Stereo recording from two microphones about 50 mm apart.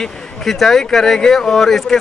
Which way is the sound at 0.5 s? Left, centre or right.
Centre.